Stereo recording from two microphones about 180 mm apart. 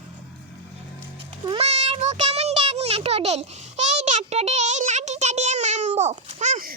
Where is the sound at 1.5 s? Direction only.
35° right (ahead or behind).